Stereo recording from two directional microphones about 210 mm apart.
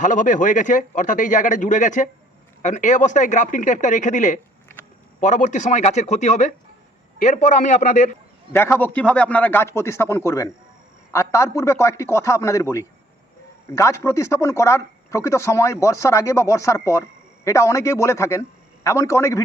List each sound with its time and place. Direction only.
0.0 s speech: 35° left (ahead or behind)
8.5 s speech: 10° left (ahead or behind)